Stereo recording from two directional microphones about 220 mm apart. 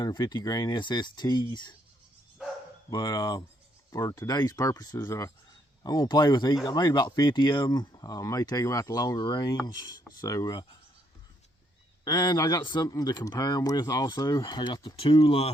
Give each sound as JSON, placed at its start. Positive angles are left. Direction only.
{"t": 0.0, "sound": "speech", "side_deg": 20}
{"t": 2.9, "sound": "speech", "side_deg": 15}
{"t": 12.0, "sound": "speech", "side_deg": 15}